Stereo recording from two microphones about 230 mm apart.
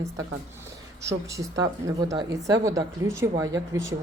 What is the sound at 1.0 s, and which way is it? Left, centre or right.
Speech, centre.